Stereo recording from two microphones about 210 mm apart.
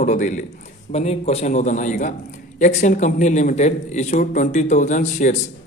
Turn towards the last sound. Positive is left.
turn(degrees=35)  # may be behind; listen again after turning